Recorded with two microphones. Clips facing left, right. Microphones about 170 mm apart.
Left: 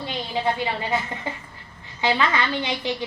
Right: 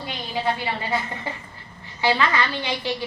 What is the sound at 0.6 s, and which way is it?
A woman's voice, 20° left (ahead or behind).